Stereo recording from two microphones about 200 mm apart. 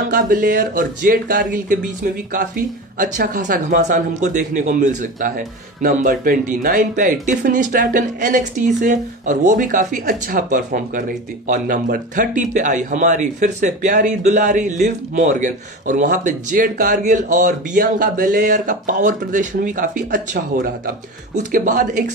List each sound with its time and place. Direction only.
0.1 s speech: 45° right (ahead or behind)